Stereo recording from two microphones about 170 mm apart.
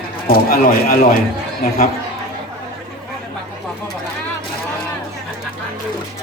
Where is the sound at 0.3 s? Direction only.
60° left (ahead or behind).